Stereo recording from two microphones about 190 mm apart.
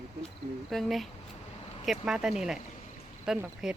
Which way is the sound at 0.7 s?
Centre (ahead or behind).